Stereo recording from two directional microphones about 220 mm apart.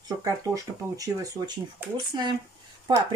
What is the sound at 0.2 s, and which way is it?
Speech, 15° right (ahead or behind).